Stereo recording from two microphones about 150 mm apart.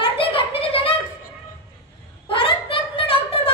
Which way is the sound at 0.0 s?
40° left (ahead or behind).